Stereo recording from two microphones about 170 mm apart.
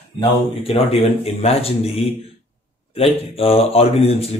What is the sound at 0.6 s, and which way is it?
Speech, 35° left (ahead or behind).